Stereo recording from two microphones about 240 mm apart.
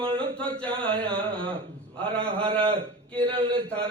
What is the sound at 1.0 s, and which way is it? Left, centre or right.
A man's voice, right.